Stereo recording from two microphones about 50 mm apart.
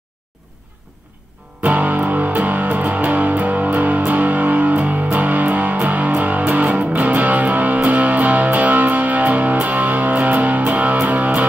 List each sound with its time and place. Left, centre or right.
1.6 s music: right